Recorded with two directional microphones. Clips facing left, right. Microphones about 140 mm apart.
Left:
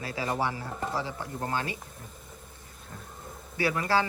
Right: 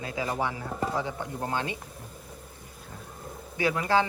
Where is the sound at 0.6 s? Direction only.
Centre (ahead or behind).